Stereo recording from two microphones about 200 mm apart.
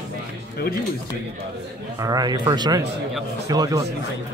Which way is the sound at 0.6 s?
50° left (ahead or behind).